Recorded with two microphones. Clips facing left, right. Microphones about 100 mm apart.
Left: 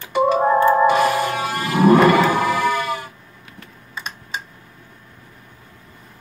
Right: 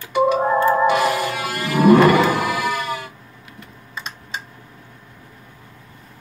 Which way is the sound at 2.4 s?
25° left (ahead or behind).